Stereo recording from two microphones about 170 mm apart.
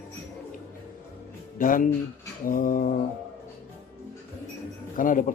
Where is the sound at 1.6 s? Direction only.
55° left (ahead or behind).